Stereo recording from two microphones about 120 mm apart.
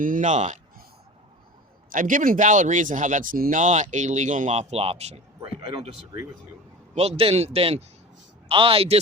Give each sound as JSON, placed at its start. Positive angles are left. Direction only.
{"t": 0.2, "sound": "speech", "side_deg": -85}
{"t": 2.0, "sound": "speech", "side_deg": -90}
{"t": 6.9, "sound": "speech", "side_deg": -60}